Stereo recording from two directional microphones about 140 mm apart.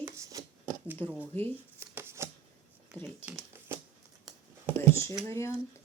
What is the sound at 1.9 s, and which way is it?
Shuffling cards, 20° right (ahead or behind).